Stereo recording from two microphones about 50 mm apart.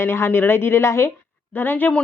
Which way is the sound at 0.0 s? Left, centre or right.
Left.